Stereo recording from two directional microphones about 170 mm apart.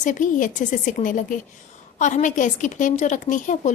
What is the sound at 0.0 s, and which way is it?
A woman's voice, 50° left (ahead or behind).